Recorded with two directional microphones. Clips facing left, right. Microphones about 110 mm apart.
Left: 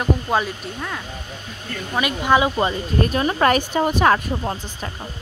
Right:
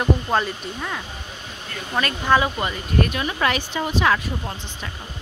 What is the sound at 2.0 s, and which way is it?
Speech, 15° left (ahead or behind).